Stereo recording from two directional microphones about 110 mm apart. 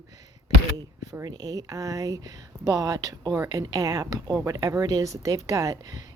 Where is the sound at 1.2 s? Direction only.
35° right (ahead or behind).